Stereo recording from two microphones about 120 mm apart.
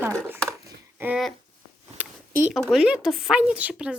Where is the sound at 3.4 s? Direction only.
15° right (ahead or behind).